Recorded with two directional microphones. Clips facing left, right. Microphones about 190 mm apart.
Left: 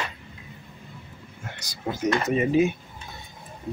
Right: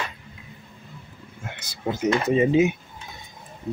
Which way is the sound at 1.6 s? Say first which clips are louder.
Right 2 dB; 20° right (ahead or behind).